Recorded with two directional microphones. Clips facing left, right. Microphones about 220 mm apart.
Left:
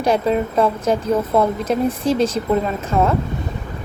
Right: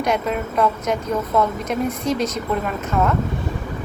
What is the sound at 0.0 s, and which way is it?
A woman's voice, 30° left (ahead or behind).